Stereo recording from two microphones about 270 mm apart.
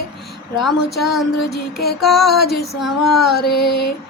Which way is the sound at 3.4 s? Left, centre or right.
Left.